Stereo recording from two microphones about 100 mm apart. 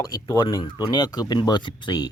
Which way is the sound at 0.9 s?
40° left (ahead or behind).